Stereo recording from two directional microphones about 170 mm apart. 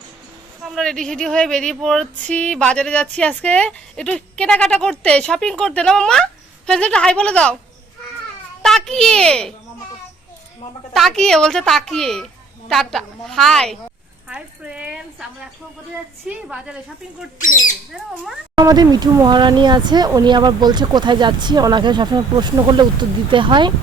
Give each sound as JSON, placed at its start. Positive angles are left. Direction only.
{"t": 0.6, "sound": "speech", "side_deg": 5}
{"t": 8.6, "sound": "a child's voice", "side_deg": 5}
{"t": 10.9, "sound": "speech", "side_deg": 0}
{"t": 18.5, "sound": "speech", "side_deg": -25}